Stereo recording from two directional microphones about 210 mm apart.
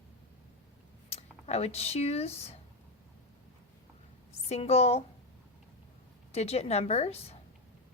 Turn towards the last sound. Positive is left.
turn(degrees=30)  # may be behind; listen again after turning